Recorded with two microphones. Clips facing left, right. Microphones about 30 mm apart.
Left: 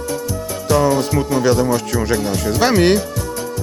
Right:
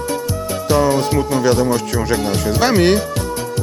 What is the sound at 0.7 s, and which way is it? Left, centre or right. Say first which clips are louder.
Speech: even; right.